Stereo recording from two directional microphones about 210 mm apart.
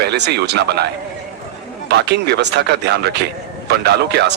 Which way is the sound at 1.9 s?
50° right (ahead or behind).